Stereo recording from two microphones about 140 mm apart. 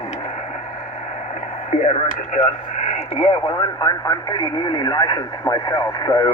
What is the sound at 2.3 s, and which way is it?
Speech, 45° left (ahead or behind).